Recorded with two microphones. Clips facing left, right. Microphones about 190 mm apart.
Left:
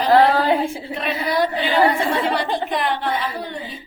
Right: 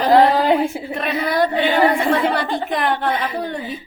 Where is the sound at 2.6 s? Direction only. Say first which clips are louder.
Right 2 dB; 50° right (ahead or behind).